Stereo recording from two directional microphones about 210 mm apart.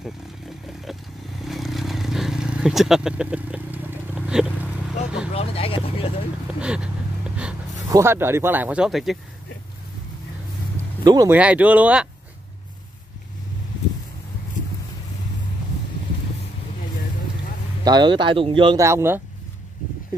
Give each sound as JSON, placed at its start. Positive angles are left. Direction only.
{"t": 1.4, "sound": "vehicle", "side_deg": 0}
{"t": 5.3, "sound": "speech", "side_deg": 30}
{"t": 6.6, "sound": "a sound", "side_deg": -5}
{"t": 7.9, "sound": "speech", "side_deg": -10}
{"t": 11.1, "sound": "speech", "side_deg": -15}
{"t": 17.8, "sound": "speech", "side_deg": -20}